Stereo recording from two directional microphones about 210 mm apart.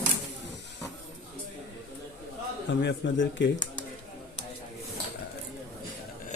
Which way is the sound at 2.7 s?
55° left (ahead or behind).